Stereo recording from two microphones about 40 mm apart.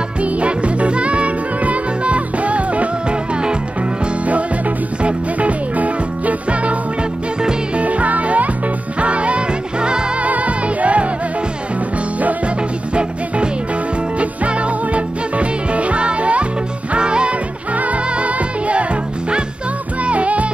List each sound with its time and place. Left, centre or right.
0.2 s music: right
4.3 s music: right
10.2 s music: right
14.1 s music: right
17.7 s music: right
20.0 s music: right